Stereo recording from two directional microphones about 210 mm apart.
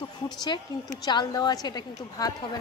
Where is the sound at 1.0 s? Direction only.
20° left (ahead or behind).